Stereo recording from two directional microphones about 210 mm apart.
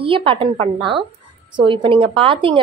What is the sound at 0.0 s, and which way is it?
Speech, 25° right (ahead or behind).